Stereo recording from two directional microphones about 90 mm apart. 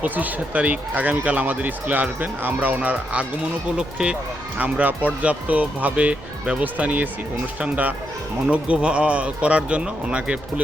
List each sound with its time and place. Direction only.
0.0 s speech: 20° right (ahead or behind)